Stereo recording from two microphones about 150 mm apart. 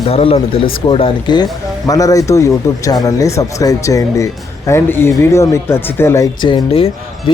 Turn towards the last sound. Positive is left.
turn(degrees=40)  # may be behind; listen again after turning